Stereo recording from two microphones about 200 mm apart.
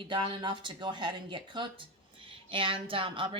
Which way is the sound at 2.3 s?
25° right (ahead or behind).